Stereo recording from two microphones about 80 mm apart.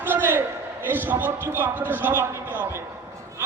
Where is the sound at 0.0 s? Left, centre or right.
Right.